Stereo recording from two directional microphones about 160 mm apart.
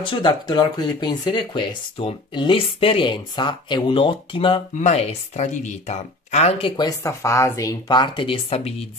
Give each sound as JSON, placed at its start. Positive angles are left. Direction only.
{"t": 0.0, "sound": "speech", "side_deg": 30}
{"t": 6.8, "sound": "speech", "side_deg": 20}